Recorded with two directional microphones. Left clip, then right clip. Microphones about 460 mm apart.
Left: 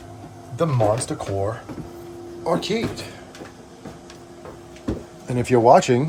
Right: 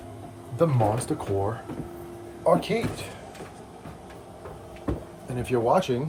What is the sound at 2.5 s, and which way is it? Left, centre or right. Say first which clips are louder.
Speech: even; centre.